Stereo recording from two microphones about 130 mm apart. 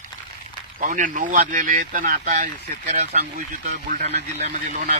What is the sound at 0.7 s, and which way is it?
Speech, 80° right.